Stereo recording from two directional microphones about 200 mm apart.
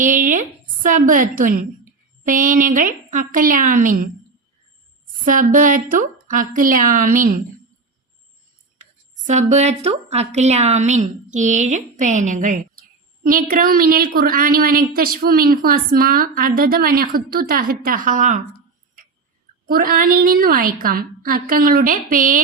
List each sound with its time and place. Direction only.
0.0 s a woman's voice: 40° right (ahead or behind)
5.2 s a woman's voice: 40° right (ahead or behind)
8.8 s a woman's voice: 40° right (ahead or behind)
19.6 s a woman's voice: 45° right (ahead or behind)